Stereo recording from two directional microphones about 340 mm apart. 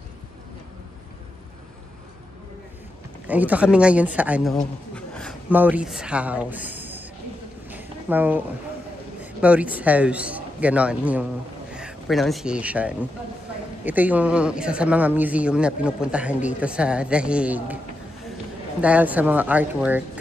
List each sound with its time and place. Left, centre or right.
3.3 s speech: centre
7.6 s a sound: centre
9.2 s a man's voice: centre
18.8 s speech: centre